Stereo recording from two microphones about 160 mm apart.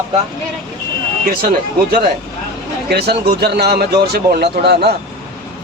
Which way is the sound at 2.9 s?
90° right.